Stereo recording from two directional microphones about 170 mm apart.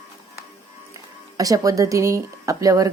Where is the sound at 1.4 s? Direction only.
20° right (ahead or behind).